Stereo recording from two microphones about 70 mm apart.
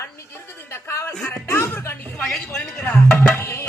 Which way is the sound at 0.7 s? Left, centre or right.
Left.